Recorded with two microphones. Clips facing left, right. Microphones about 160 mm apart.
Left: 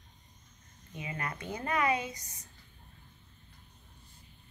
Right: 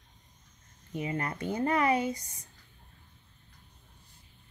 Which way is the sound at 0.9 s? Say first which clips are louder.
Right 6 dB; 30° right (ahead or behind).